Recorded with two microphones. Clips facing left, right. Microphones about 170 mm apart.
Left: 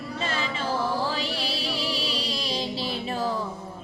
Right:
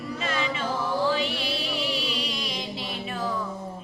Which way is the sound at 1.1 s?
35° left (ahead or behind).